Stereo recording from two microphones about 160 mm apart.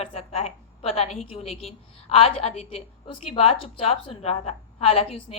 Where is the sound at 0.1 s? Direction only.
35° left (ahead or behind).